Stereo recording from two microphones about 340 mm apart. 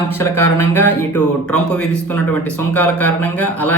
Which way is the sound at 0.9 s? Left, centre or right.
Left.